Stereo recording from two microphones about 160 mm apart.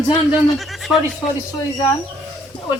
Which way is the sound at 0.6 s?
Centre (ahead or behind).